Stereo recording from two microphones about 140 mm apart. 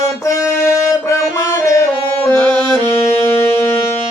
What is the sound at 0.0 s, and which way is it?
Music, 20° left (ahead or behind).